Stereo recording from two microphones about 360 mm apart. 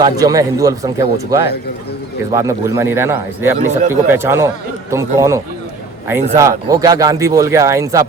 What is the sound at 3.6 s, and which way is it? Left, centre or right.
Speech, centre.